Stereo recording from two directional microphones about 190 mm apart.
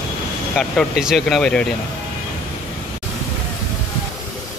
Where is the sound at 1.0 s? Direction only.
Centre (ahead or behind).